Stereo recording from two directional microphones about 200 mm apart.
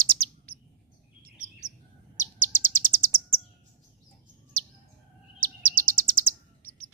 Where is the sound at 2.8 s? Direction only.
45° right (ahead or behind).